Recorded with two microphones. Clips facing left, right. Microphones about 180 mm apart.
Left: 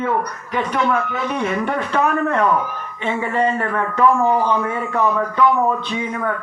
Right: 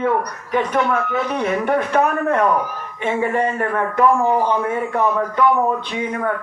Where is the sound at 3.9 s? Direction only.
15° right (ahead or behind).